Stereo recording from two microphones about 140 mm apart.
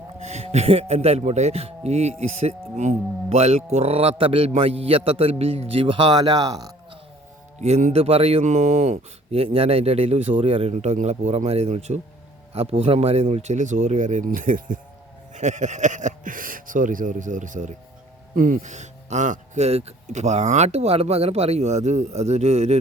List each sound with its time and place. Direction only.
0.2 s speech: 50° right (ahead or behind); by 6.7 s 25° right (ahead or behind)
7.6 s speech: 55° right (ahead or behind)
8.0 s speech: 45° right (ahead or behind); by 14.8 s 70° right (ahead or behind)
15.4 s speech: 60° right (ahead or behind)